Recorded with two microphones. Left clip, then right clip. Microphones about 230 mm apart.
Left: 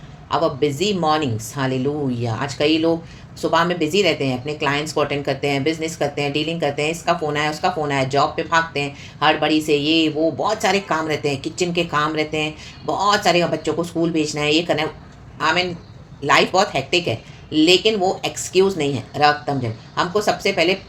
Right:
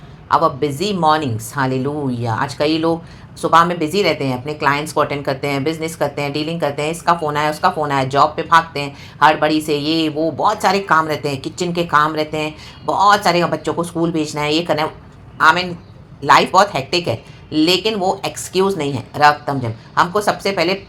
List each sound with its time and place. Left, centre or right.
0.3 s a woman's voice: centre